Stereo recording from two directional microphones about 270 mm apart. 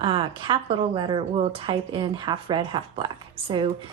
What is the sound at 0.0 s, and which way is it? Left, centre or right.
Speech, centre.